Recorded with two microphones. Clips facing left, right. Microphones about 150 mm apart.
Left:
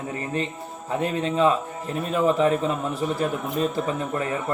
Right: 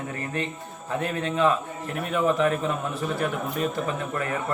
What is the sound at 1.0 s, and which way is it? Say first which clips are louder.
A man's voice: left 3 dB; 30° left (ahead or behind).